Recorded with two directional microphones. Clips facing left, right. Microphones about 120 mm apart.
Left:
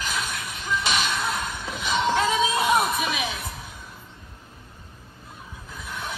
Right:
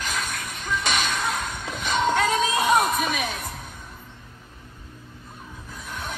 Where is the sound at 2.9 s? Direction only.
50° right (ahead or behind).